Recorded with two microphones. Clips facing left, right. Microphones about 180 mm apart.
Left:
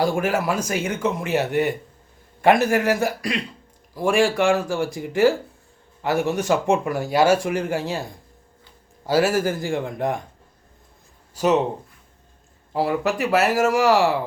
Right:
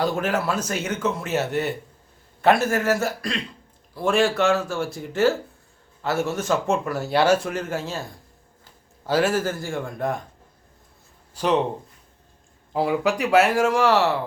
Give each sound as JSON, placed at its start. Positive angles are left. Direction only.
{"t": 0.0, "sound": "speech", "side_deg": 10}
{"t": 9.0, "sound": "speech", "side_deg": 10}
{"t": 11.3, "sound": "speech", "side_deg": 5}
{"t": 12.7, "sound": "speech", "side_deg": 0}